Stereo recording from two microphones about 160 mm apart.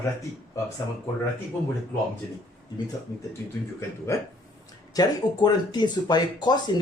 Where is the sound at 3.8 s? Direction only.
15° left (ahead or behind).